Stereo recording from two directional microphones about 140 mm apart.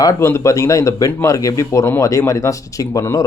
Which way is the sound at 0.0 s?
20° left (ahead or behind).